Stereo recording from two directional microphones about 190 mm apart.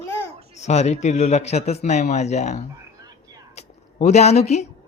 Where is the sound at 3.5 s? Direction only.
35° left (ahead or behind).